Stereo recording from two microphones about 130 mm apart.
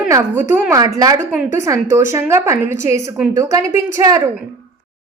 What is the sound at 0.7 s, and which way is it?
A woman's voice, 25° right (ahead or behind).